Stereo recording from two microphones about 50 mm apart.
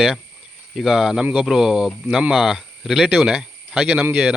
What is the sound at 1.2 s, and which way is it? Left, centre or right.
Speech, right.